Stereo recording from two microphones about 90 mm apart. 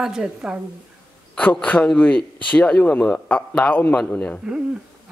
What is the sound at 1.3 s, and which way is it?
A man's voice, 15° left (ahead or behind).